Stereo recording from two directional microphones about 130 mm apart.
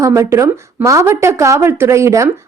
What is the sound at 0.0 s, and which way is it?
Speech, 20° right (ahead or behind).